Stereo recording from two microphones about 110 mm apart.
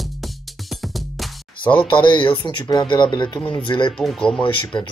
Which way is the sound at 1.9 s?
50° left (ahead or behind).